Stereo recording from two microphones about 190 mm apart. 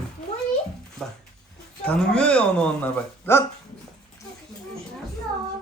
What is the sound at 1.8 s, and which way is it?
Speech, 5° left (ahead or behind).